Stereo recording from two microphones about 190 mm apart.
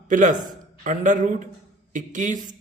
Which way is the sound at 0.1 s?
40° right (ahead or behind).